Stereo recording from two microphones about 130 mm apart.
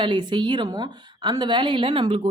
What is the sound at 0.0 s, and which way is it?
Speech, 35° right (ahead or behind).